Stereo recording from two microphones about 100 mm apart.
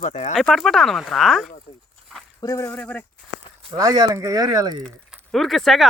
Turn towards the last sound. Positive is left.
turn(degrees=0)  # may be behind; listen again after turning